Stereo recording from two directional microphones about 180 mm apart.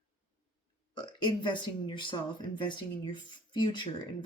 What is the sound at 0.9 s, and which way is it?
Speech, 25° left (ahead or behind).